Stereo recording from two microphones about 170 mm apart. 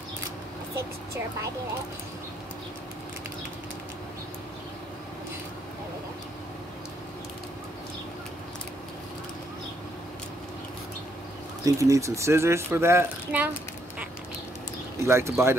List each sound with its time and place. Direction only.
11.6 s speech: 20° right (ahead or behind)
15.0 s speech: 15° right (ahead or behind)